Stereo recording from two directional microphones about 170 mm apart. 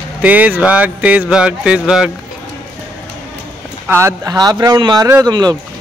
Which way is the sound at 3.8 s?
15° right (ahead or behind).